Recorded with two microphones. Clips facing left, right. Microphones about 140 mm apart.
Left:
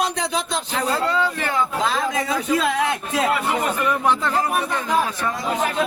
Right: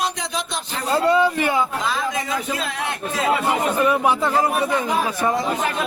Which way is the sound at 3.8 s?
10° right (ahead or behind).